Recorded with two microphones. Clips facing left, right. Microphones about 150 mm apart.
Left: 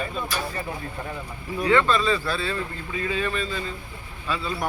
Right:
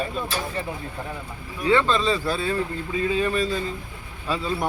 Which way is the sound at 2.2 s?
15° right (ahead or behind).